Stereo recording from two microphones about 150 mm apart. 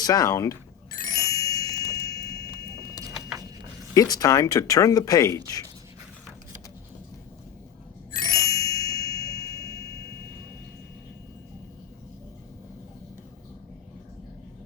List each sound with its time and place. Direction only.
0.0 s speech: 25° left (ahead or behind)
0.9 s ding: 25° left (ahead or behind)
3.9 s speech: 25° left (ahead or behind)
8.1 s ding: 25° left (ahead or behind)